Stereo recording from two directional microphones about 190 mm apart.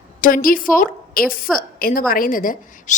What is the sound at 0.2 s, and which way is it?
A woman's voice, 45° left (ahead or behind).